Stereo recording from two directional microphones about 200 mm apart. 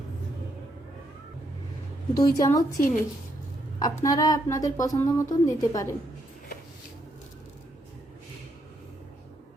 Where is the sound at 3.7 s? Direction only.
20° left (ahead or behind).